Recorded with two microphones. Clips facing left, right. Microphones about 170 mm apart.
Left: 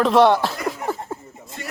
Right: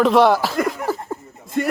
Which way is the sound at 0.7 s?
Centre (ahead or behind).